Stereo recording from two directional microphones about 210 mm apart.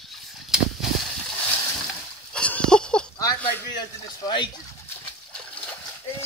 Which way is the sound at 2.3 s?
5° left (ahead or behind).